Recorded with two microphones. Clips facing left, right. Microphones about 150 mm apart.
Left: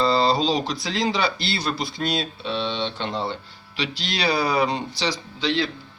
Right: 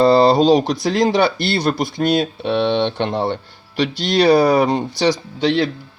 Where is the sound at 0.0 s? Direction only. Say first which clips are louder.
Right 8 dB; 50° right (ahead or behind).